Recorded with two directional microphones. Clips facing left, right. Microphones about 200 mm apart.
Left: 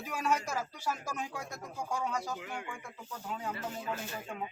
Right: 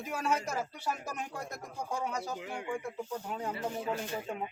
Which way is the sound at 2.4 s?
25° right (ahead or behind).